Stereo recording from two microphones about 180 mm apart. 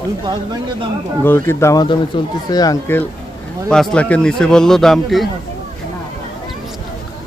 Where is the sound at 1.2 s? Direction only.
10° left (ahead or behind).